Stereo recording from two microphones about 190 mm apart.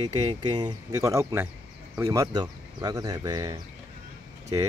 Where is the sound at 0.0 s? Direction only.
30° right (ahead or behind).